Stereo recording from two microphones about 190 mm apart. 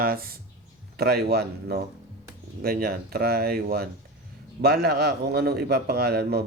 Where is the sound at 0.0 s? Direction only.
50° right (ahead or behind).